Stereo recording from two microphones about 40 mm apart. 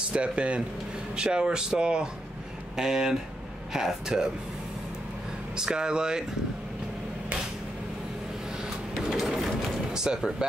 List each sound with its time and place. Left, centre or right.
0.1 s speech: right
5.6 s speech: centre
9.0 s printer: centre
9.9 s speech: centre